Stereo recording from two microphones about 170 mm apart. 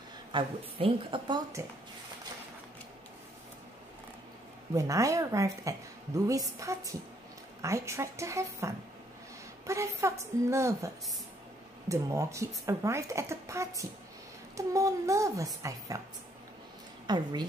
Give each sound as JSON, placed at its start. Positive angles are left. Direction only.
{"t": 0.3, "sound": "a woman's voice", "side_deg": -30}
{"t": 4.7, "sound": "a woman's voice", "side_deg": -20}
{"t": 11.9, "sound": "a woman's voice", "side_deg": -15}
{"t": 17.0, "sound": "a woman's voice", "side_deg": -25}